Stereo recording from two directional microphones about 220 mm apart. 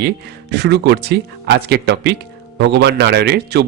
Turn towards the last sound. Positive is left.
turn(degrees=-50)  # may be behind; listen again after turning